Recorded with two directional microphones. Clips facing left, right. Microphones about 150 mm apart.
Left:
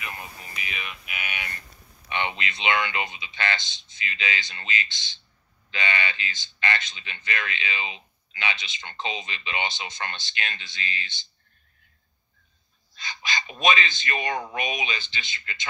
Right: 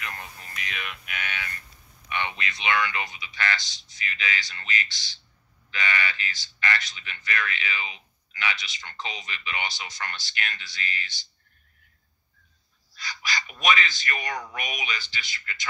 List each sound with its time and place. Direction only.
0.0 s a sound: 10° left (ahead or behind)
2.0 s speech: 25° left (ahead or behind)
12.9 s speech: 20° left (ahead or behind)